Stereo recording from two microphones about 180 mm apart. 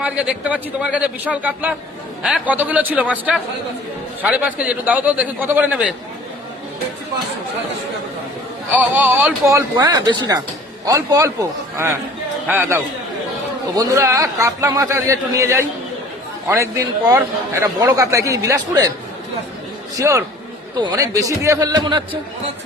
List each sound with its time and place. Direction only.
0.0 s a man's voice: 5° right (ahead or behind)
8.7 s a man's voice: 10° right (ahead or behind)
12.5 s a man's voice: 10° right (ahead or behind)
20.0 s a man's voice: 15° right (ahead or behind)